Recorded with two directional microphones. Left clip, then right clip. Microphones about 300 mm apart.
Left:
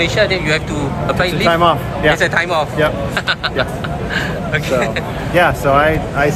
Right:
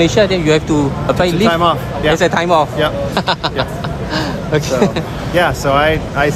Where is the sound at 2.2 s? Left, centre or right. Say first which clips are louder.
Right 3 dB; right.